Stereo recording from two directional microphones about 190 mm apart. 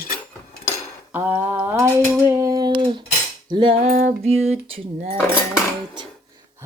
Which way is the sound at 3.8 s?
40° right (ahead or behind).